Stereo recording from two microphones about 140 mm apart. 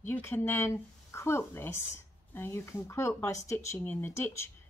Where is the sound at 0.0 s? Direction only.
15° left (ahead or behind).